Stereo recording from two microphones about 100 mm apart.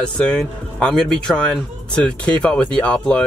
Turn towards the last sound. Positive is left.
turn(degrees=10)  # may be behind; listen again after turning